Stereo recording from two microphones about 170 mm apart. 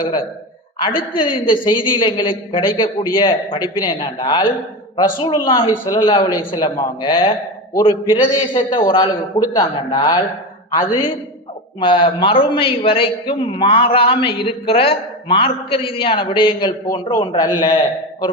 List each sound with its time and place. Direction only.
0.8 s a woman's voice: 30° left (ahead or behind)
11.8 s a man's voice: 30° left (ahead or behind)